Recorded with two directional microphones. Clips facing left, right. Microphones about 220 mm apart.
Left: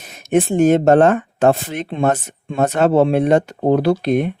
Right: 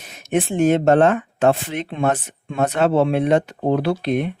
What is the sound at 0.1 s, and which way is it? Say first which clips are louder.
Speech: left 5 dB; 45° left (ahead or behind).